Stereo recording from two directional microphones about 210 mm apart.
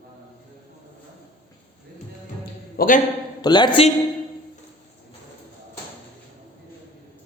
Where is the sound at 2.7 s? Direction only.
40° left (ahead or behind).